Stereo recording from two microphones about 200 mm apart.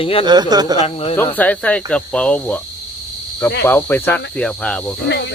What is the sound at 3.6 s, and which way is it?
Speech, 10° left (ahead or behind).